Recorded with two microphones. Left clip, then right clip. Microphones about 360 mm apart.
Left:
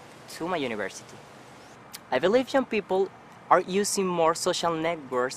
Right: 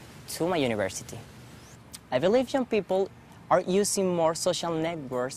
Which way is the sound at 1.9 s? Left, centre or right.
Right.